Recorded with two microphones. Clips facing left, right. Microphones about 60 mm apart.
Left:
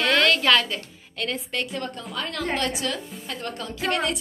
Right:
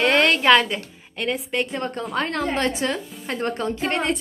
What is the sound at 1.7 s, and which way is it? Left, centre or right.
A woman's voice, right.